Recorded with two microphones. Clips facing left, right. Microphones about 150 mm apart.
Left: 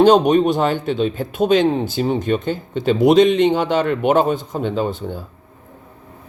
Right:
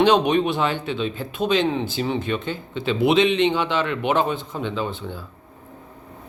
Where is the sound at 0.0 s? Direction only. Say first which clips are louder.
Left 5 dB; 40° left (ahead or behind).